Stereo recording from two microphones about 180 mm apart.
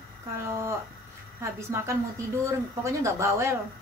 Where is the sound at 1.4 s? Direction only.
15° right (ahead or behind).